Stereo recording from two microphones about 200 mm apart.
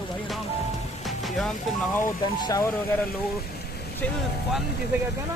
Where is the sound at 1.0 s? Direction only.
Centre (ahead or behind).